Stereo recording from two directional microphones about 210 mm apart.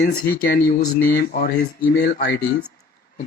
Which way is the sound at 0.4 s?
50° left (ahead or behind).